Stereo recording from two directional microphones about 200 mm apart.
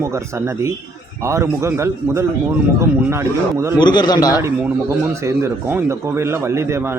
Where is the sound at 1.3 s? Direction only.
15° right (ahead or behind).